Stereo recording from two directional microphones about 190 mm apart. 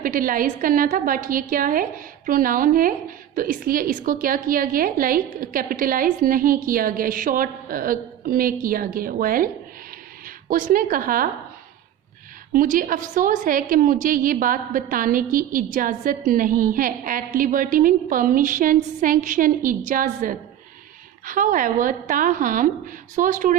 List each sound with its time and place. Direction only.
0.0 s a woman's voice: 45° right (ahead or behind)
12.5 s a woman's voice: 45° right (ahead or behind)